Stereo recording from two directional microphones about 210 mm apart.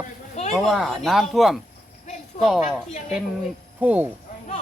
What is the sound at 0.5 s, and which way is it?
Speech, centre (ahead or behind).